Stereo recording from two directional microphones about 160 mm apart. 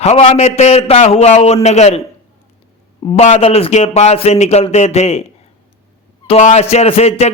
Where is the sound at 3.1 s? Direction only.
45° left (ahead or behind).